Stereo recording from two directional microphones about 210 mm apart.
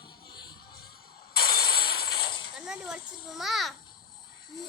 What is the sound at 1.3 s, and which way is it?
Mechanisms, 45° left (ahead or behind).